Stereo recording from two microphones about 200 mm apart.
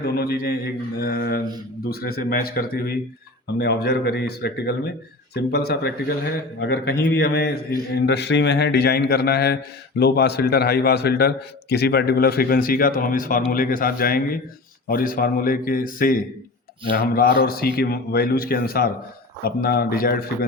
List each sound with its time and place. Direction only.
0.2 s a man's voice: 50° left (ahead or behind)